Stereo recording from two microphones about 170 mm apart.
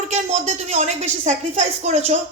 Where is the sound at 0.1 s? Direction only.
40° right (ahead or behind).